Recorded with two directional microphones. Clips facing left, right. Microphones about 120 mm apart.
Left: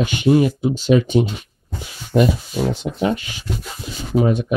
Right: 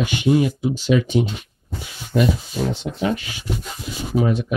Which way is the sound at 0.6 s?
50° left (ahead or behind).